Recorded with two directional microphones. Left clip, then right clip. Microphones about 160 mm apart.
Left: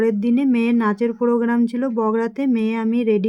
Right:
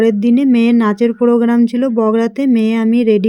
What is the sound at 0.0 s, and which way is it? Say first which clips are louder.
Speech: right 6 dB; 20° right (ahead or behind).